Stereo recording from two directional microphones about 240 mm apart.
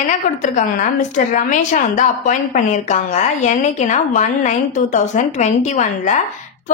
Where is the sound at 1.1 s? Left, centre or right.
Left.